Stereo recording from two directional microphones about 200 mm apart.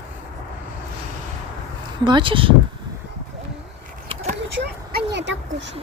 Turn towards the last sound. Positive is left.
turn(degrees=-60)  # may be behind; listen again after turning